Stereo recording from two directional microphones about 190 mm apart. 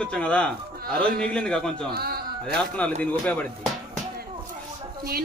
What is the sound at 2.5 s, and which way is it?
Speech, 5° left (ahead or behind).